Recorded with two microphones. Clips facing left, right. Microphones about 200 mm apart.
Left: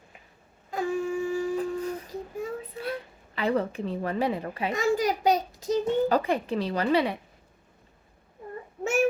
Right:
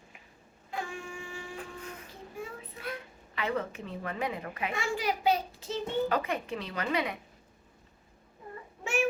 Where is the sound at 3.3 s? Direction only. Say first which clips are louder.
Left 6 dB; 35° left (ahead or behind).